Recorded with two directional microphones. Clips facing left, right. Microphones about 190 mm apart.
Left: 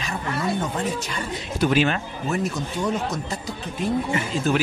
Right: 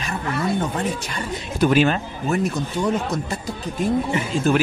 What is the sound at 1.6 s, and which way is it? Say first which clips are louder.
Speech: right 3 dB; 45° right (ahead or behind).